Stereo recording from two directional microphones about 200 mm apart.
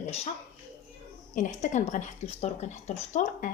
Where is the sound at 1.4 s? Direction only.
35° left (ahead or behind).